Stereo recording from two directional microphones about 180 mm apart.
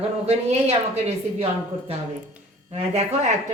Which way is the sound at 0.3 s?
35° right (ahead or behind).